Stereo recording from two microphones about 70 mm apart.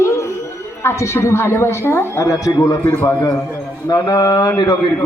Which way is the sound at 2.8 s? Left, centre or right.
Left.